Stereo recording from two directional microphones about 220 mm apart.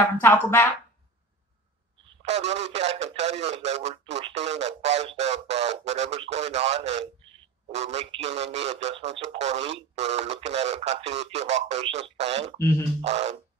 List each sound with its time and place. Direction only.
0.2 s speech: 10° left (ahead or behind)
2.2 s speech: 30° right (ahead or behind)
12.5 s speech: 10° left (ahead or behind)
13.0 s speech: 30° right (ahead or behind)